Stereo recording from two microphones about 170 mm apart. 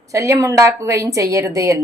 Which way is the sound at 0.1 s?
20° right (ahead or behind).